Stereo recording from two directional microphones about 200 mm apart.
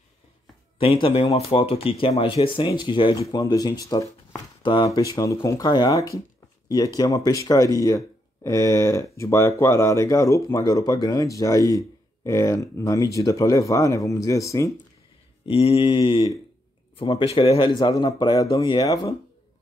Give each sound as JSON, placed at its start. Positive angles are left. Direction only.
{"t": 0.7, "sound": "speech", "side_deg": 25}
{"t": 15.4, "sound": "speech", "side_deg": 30}